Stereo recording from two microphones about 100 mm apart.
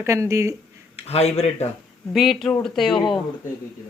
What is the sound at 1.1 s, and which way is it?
Speech, 90° left.